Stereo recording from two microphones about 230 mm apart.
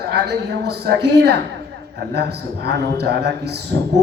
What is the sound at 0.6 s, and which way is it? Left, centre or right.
Speech, right.